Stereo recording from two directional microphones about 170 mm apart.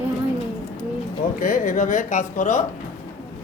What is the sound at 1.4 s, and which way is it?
A woman's voice, 50° left (ahead or behind).